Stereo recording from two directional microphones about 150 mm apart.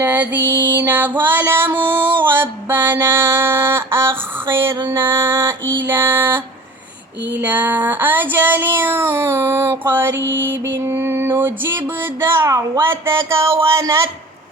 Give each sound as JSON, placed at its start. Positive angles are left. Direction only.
{"t": 0.0, "sound": "child singing", "side_deg": -10}
{"t": 1.2, "sound": "music", "side_deg": -15}
{"t": 2.2, "sound": "mantra", "side_deg": -15}
{"t": 4.8, "sound": "child singing", "side_deg": -20}
{"t": 7.4, "sound": "child singing", "side_deg": -10}